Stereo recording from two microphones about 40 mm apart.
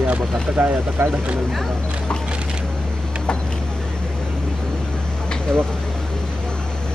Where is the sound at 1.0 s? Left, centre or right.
Right.